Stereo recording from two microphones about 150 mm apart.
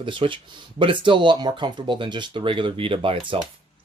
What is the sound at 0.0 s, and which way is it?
Speech, 35° right (ahead or behind).